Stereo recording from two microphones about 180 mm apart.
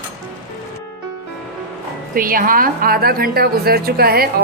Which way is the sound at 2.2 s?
50° right (ahead or behind).